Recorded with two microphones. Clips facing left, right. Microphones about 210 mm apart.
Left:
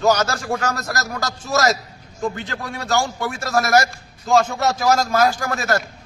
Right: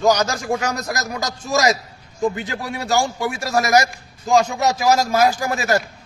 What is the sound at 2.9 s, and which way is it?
Speech, 5° right (ahead or behind).